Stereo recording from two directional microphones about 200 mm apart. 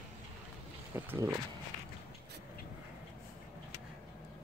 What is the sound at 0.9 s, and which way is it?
Speech, 10° right (ahead or behind).